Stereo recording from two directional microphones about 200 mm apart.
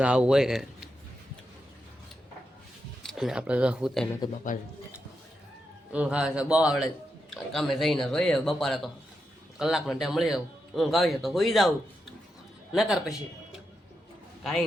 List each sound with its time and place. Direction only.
0.0 s a man's voice: 5° right (ahead or behind)
3.0 s a man's voice: centre (ahead or behind)
4.5 s speech: 40° left (ahead or behind)
5.9 s a man's voice: 5° right (ahead or behind)
12.7 s a man's voice: centre (ahead or behind)